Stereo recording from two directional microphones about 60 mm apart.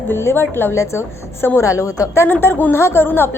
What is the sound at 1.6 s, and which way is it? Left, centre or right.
Speech, left.